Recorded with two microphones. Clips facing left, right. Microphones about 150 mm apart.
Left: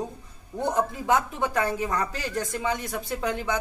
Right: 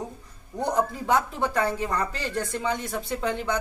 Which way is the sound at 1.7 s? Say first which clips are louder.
Even; 5° left (ahead or behind).